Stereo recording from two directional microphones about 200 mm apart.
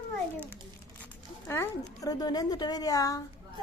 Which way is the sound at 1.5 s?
15° left (ahead or behind).